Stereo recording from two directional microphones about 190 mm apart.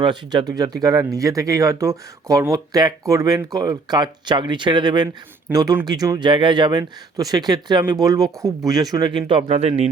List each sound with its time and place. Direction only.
0.0 s speech: 25° right (ahead or behind)